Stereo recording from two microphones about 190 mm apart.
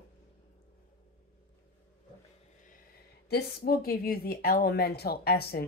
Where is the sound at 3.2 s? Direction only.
55° left (ahead or behind).